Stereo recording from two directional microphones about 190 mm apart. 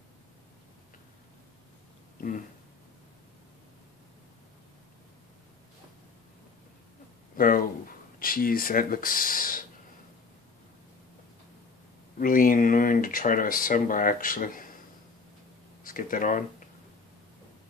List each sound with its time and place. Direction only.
7.3 s a sound: 50° left (ahead or behind)
8.2 s speech: 50° left (ahead or behind)
12.2 s speech: 45° left (ahead or behind)
15.8 s speech: 45° left (ahead or behind)